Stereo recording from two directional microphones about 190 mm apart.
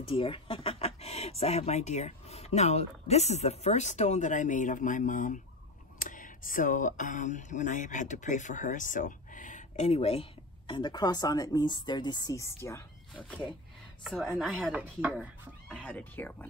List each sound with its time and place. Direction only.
0.0 s speech: 25° left (ahead or behind)
14.0 s speech: centre (ahead or behind)
15.7 s speech: 10° left (ahead or behind)